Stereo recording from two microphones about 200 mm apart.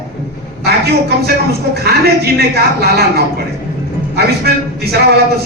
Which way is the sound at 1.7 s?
55° right (ahead or behind).